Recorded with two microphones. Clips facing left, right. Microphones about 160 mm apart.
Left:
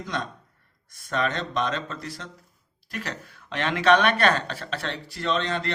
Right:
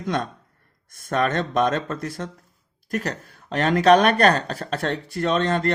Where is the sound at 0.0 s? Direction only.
50° right (ahead or behind).